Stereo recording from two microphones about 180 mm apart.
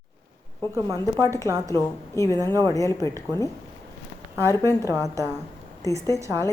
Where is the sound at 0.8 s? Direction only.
20° right (ahead or behind).